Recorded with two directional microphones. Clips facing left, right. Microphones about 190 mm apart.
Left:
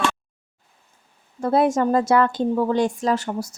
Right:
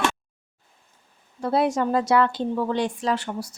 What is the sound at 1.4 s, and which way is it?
A woman's voice, 50° left (ahead or behind).